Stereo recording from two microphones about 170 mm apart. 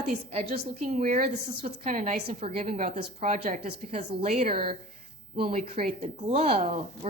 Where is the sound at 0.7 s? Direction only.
45° right (ahead or behind).